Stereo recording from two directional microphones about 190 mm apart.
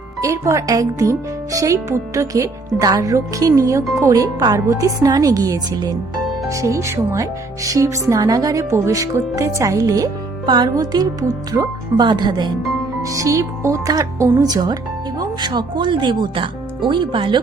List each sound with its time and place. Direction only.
0.2 s speech: 15° right (ahead or behind)